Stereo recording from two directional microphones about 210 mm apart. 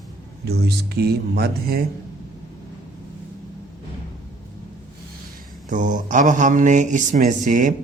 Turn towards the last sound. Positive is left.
turn(degrees=-40)  # may be behind; listen again after turning